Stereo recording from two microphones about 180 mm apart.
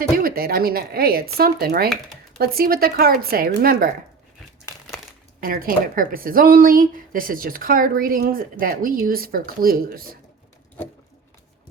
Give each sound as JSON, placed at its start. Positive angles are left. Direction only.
{"t": 0.2, "sound": "speech", "side_deg": -55}
{"t": 5.4, "sound": "a woman's voice", "side_deg": -55}